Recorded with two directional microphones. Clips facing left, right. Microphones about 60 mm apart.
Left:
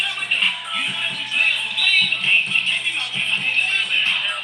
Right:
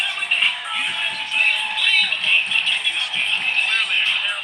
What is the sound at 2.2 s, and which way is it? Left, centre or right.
Music, left.